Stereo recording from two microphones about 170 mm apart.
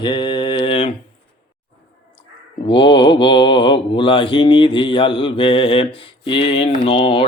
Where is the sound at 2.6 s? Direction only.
30° left (ahead or behind).